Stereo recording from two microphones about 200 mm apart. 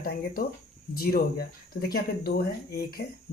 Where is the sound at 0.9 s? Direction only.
50° left (ahead or behind).